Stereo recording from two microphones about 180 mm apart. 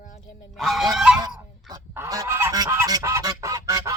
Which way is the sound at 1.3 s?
Centre (ahead or behind).